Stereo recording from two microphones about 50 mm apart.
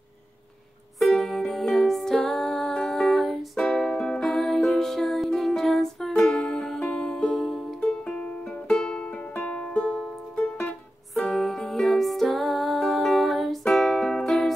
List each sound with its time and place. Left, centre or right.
0.9 s music: centre
3.5 s music: centre
3.8 s music: centre
11.1 s music: centre